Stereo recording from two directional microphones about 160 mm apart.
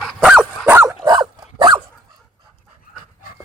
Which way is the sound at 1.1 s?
25° right (ahead or behind).